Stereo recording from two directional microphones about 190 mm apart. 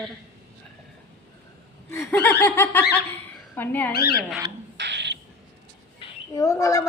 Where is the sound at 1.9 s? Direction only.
10° left (ahead or behind).